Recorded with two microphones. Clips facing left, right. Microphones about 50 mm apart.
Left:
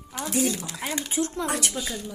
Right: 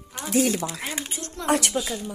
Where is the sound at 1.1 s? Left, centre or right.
Centre.